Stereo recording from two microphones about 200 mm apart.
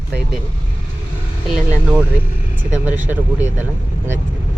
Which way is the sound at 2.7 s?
10° right (ahead or behind).